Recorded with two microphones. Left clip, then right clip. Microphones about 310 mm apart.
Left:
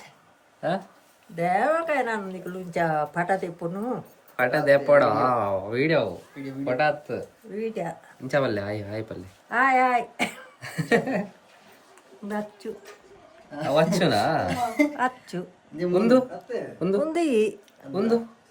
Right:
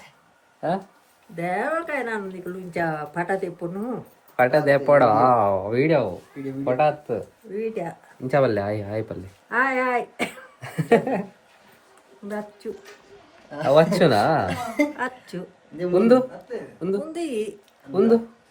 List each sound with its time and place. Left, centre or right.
0.6 s speech: centre
1.4 s speech: centre
4.4 s speech: centre
7.5 s speech: centre
8.3 s speech: centre
9.5 s speech: centre
10.6 s speech: centre
13.6 s speech: centre
14.4 s speech: centre
14.9 s speech: centre
15.9 s speech: centre
17.0 s speech: left
17.9 s speech: centre